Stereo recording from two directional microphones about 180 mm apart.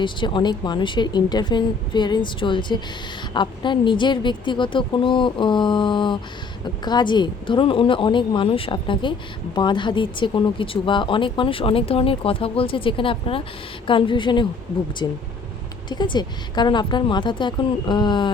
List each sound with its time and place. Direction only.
0.0 s speech: 25° left (ahead or behind)